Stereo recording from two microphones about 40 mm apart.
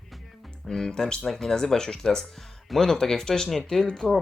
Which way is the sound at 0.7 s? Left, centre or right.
Centre.